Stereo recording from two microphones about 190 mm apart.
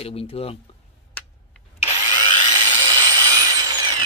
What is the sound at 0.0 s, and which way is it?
Speech, 30° left (ahead or behind).